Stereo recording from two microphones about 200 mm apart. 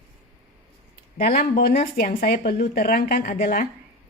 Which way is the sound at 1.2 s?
45° left (ahead or behind).